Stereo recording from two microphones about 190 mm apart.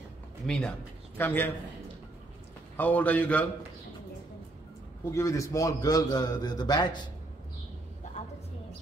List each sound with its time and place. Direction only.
0.5 s a man's voice: 5° left (ahead or behind)
2.8 s a man's voice: 10° left (ahead or behind)
5.1 s a man's voice: 15° left (ahead or behind)